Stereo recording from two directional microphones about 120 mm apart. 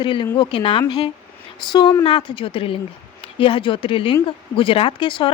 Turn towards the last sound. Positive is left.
turn(degrees=45)  # may be behind; listen again after turning